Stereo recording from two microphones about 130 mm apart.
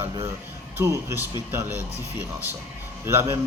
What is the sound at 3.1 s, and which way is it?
Speech, 20° right (ahead or behind).